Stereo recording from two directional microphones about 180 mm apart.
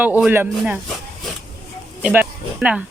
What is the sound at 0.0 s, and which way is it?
Speech, 10° right (ahead or behind).